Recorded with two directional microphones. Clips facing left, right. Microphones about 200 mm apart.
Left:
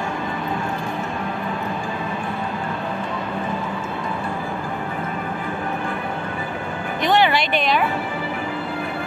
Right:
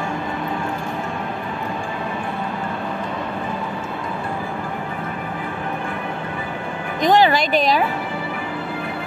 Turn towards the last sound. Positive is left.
turn(degrees=-40)  # may be behind; listen again after turning